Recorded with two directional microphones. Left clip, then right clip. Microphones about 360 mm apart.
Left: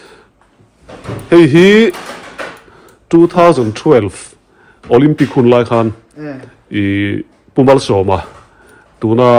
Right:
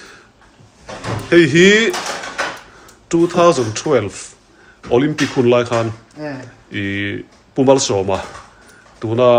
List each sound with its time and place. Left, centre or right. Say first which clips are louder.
1.3 s speech: left 4 dB; centre
3.1 s speech: left 5 dB; centre